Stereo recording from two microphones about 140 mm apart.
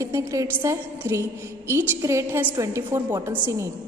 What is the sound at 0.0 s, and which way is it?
A woman's voice, 20° right (ahead or behind).